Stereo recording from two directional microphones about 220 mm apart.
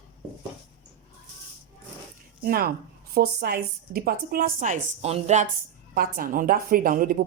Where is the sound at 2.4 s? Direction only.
40° right (ahead or behind).